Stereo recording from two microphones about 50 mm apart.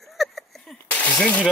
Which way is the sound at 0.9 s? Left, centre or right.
Left.